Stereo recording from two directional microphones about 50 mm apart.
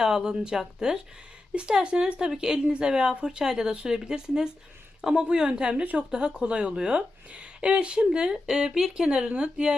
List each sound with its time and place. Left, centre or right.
0.0 s a woman's voice: centre